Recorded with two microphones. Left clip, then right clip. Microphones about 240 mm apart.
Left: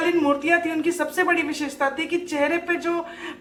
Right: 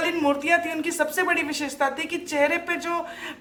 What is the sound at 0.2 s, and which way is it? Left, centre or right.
Speech, right.